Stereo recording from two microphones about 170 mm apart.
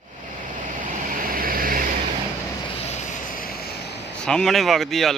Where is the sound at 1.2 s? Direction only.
60° right (ahead or behind).